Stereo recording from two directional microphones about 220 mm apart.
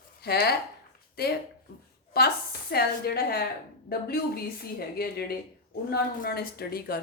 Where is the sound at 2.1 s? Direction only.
45° left (ahead or behind).